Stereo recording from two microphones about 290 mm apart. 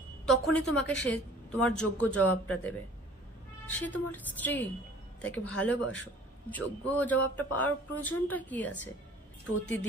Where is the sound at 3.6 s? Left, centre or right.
Centre.